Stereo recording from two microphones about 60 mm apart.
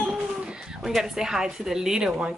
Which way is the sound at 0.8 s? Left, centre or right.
Centre.